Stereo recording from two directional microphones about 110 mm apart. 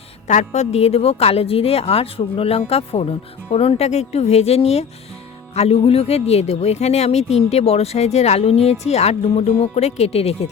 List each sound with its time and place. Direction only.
0.3 s a woman's voice: 90° left; by 10.5 s 70° left (ahead or behind)